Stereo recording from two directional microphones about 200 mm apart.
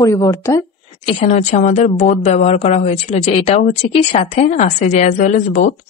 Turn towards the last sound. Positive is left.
turn(degrees=35)  # may be behind; listen again after turning